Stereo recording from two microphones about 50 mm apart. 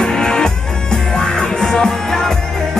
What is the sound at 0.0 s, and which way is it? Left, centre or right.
Music, centre.